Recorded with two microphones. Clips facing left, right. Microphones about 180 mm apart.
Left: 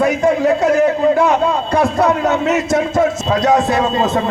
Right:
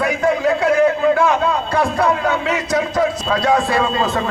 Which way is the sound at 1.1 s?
20° left (ahead or behind).